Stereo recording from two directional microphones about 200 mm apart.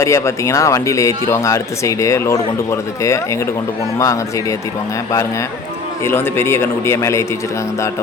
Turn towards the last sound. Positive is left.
turn(degrees=15)  # may be behind; listen again after turning